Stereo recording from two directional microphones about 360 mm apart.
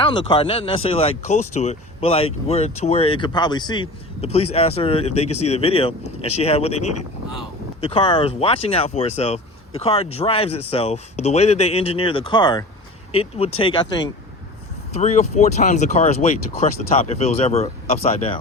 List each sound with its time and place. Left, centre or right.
0.0 s speech: centre
6.7 s speech: left
7.8 s speech: centre